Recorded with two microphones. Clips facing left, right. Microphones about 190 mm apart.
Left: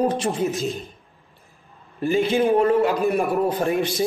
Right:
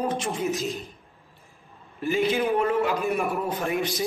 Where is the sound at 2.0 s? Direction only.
30° left (ahead or behind).